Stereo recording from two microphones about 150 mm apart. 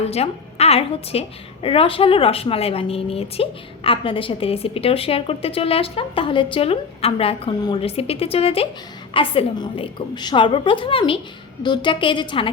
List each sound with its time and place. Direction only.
0.0 s a woman's voice: 45° left (ahead or behind)